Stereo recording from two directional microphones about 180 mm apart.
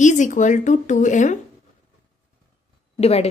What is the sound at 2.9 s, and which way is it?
Speech, 35° left (ahead or behind).